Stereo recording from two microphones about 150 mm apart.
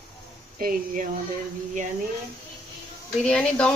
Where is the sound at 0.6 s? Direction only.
70° right (ahead or behind).